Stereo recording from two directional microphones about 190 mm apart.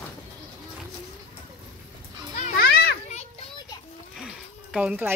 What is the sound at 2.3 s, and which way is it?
Children playing, 40° left (ahead or behind).